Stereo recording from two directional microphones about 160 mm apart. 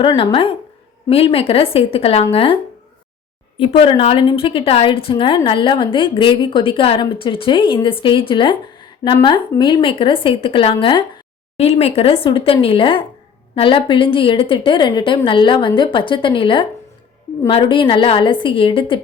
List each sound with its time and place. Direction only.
0.2 s a woman's voice: 35° left (ahead or behind)
3.6 s a woman's voice: 35° left (ahead or behind)